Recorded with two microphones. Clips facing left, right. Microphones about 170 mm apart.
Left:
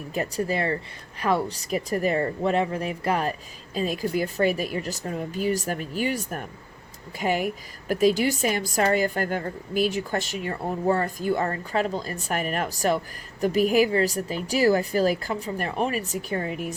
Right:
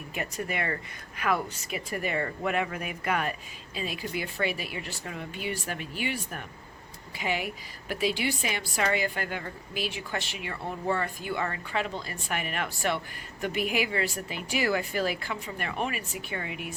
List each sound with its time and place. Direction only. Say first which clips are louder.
0.1 s a woman's voice: left 7 dB; 35° left (ahead or behind)